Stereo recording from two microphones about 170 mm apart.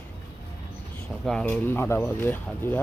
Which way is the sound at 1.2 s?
5° left (ahead or behind).